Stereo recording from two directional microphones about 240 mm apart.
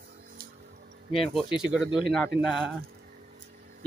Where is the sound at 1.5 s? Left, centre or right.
Centre.